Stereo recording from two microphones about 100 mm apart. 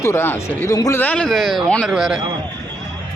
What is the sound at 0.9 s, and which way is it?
Speech, 15° left (ahead or behind).